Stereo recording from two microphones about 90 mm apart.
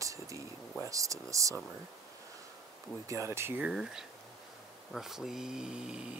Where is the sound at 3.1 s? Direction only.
30° right (ahead or behind).